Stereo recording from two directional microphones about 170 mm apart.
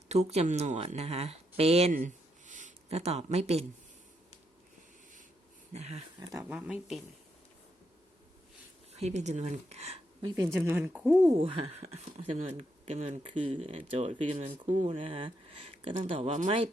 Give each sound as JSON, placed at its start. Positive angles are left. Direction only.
{"t": 0.1, "sound": "speech", "side_deg": -40}
{"t": 1.9, "sound": "a sound", "side_deg": -50}
{"t": 5.7, "sound": "speech", "side_deg": -40}
{"t": 6.1, "sound": "speech", "side_deg": -25}
{"t": 6.5, "sound": "speech", "side_deg": -5}
{"t": 9.0, "sound": "speech", "side_deg": -40}
{"t": 10.2, "sound": "speech", "side_deg": -20}
{"t": 11.3, "sound": "speech", "side_deg": -35}